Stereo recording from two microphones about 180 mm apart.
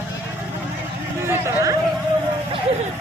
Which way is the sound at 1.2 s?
15° right (ahead or behind).